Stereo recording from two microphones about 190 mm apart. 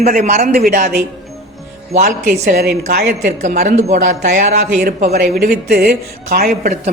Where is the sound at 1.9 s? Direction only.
40° right (ahead or behind).